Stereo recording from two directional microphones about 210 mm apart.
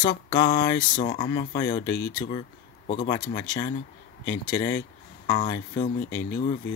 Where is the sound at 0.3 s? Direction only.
20° left (ahead or behind).